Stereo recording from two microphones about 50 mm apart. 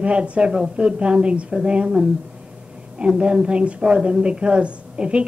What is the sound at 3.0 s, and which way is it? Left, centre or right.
A woman's voice, centre.